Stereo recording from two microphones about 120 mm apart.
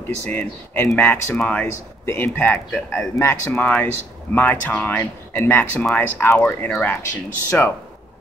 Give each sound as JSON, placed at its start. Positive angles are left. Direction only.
{"t": 0.3, "sound": "speech", "side_deg": 10}